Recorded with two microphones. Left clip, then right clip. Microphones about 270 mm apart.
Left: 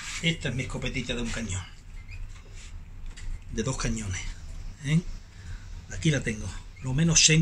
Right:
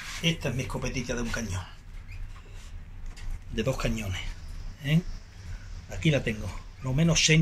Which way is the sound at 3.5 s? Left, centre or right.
Left.